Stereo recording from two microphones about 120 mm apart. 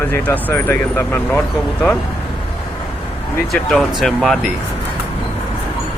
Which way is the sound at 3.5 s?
Centre (ahead or behind).